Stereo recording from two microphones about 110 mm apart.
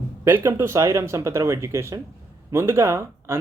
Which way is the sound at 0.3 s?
25° right (ahead or behind).